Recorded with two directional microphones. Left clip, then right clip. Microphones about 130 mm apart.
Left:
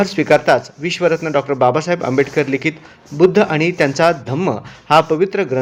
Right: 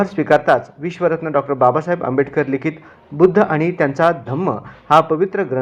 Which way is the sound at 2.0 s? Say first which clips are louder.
Left 2 dB; 25° left (ahead or behind).